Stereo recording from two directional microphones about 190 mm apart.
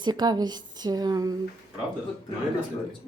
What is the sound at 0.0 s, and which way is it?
Speech, 20° right (ahead or behind).